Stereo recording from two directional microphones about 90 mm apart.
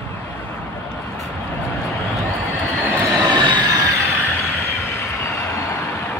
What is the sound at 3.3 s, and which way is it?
Train, 55° right (ahead or behind).